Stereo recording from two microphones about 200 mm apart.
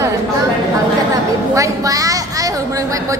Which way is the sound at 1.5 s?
15° right (ahead or behind).